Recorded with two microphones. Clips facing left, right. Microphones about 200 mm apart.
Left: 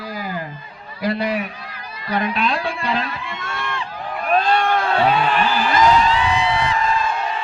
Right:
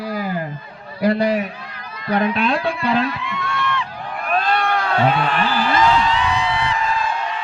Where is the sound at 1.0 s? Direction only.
50° right (ahead or behind).